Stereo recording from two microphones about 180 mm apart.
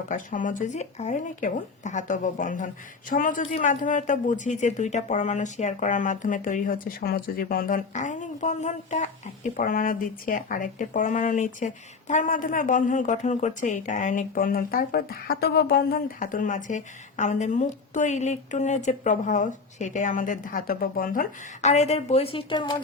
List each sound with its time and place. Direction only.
0.1 s speech: 45° left (ahead or behind); by 22.8 s 25° left (ahead or behind)